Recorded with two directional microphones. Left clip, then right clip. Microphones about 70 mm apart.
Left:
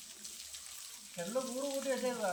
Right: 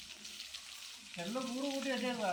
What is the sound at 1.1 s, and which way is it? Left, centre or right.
Frying, left.